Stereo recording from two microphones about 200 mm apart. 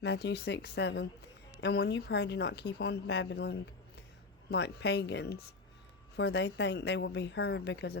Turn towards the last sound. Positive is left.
turn(degrees=55)  # may be behind; listen again after turning